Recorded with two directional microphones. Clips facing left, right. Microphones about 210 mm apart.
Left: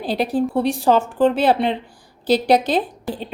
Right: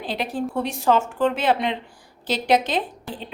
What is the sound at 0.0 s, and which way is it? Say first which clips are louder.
A woman's voice: left 6 dB; 35° left (ahead or behind).